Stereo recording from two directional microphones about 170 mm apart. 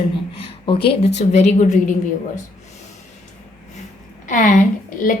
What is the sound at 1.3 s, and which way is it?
Speech, 40° left (ahead or behind).